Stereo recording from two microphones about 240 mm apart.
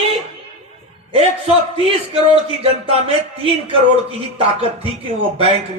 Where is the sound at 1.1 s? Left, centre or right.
Right.